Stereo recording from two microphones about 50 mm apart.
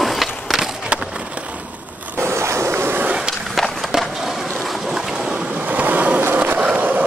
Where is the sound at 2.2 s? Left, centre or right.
Right.